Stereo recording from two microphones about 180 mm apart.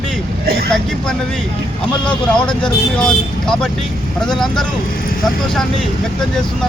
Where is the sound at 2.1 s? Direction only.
5° left (ahead or behind).